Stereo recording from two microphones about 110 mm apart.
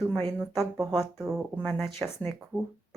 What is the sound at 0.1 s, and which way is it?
Speech, 5° left (ahead or behind).